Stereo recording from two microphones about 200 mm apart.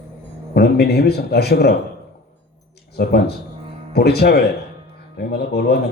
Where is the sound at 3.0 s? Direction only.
55° left (ahead or behind).